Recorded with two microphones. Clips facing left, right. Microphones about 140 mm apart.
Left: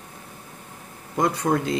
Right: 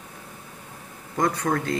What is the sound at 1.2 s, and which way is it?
Speech, 20° left (ahead or behind).